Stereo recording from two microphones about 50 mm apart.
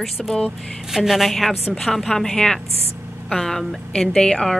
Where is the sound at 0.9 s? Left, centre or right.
Centre.